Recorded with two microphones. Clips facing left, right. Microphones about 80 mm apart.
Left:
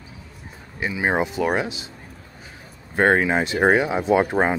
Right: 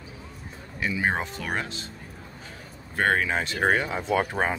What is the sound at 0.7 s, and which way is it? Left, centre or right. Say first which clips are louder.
Speech: left 4 dB; centre.